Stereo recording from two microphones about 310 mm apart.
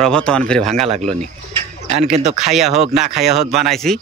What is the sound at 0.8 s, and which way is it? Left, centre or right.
Speech, right.